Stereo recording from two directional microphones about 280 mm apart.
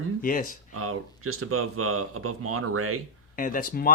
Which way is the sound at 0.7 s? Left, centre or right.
Right.